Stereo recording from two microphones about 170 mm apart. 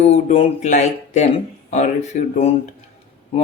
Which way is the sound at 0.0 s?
40° left (ahead or behind).